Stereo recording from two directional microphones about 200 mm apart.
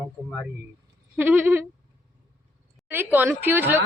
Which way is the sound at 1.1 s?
10° right (ahead or behind).